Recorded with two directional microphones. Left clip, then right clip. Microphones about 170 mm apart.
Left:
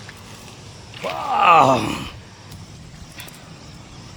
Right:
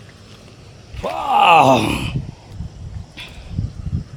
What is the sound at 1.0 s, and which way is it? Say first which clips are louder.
Speech: right 3 dB; 45° right (ahead or behind).